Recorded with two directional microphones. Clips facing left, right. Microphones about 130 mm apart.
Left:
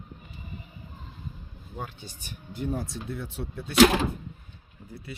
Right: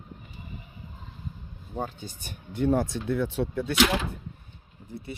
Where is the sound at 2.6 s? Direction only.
85° right.